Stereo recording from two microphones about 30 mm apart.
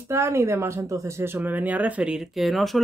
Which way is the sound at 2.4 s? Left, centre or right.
Centre.